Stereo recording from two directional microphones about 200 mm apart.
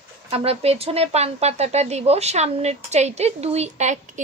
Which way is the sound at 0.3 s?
30° right (ahead or behind).